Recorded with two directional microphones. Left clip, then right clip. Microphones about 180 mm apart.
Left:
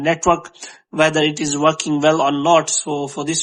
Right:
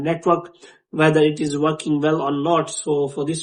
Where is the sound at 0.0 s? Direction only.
35° left (ahead or behind).